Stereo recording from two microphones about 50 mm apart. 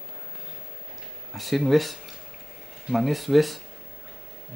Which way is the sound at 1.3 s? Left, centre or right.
Centre.